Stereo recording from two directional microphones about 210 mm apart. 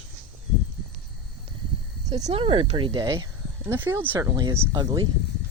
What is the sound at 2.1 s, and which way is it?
Speech, 15° right (ahead or behind).